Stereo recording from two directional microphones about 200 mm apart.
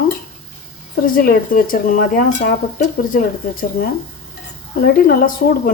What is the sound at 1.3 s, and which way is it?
Speech, 45° left (ahead or behind).